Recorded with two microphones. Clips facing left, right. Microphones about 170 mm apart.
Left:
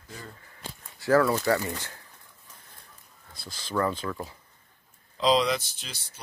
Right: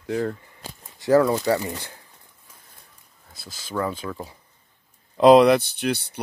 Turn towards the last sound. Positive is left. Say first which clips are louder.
# right 19 dB
turn(degrees=-65)  # may be behind; listen again after turning